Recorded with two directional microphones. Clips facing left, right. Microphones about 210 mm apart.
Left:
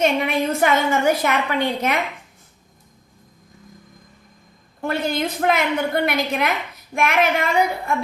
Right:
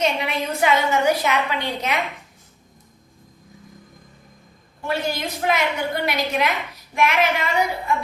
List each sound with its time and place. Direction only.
0.0 s a woman's voice: 50° left (ahead or behind)
4.8 s a woman's voice: 55° left (ahead or behind)